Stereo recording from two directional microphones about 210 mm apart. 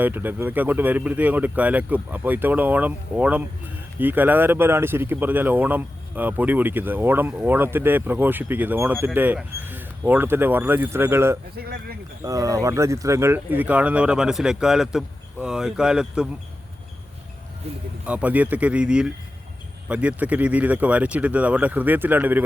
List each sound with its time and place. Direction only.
0.0 s speech: 10° right (ahead or behind)
11.5 s speech: 45° right (ahead or behind)
12.2 s speech: 15° right (ahead or behind)
18.0 s speech: 5° right (ahead or behind)